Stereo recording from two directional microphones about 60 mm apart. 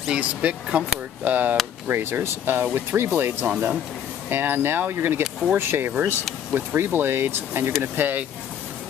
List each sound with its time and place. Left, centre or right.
0.2 s speech: right
1.9 s speech: right